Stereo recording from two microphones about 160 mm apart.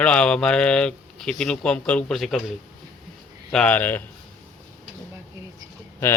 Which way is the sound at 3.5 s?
10° left (ahead or behind).